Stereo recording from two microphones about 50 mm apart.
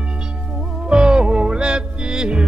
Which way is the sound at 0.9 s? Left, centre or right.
Centre.